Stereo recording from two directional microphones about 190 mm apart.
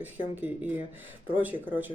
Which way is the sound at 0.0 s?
10° right (ahead or behind).